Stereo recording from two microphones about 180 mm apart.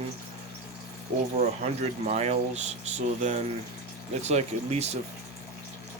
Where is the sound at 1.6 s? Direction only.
35° right (ahead or behind).